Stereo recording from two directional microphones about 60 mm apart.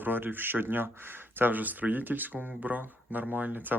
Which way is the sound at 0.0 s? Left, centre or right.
Right.